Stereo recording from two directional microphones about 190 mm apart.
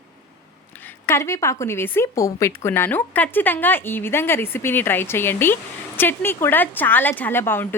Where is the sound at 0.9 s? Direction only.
15° left (ahead or behind).